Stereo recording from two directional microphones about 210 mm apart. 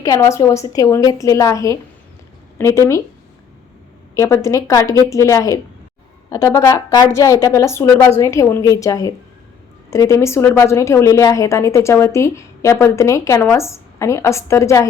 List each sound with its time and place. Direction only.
0.0 s a woman's voice: 15° left (ahead or behind)
4.1 s a woman's voice: 15° left (ahead or behind)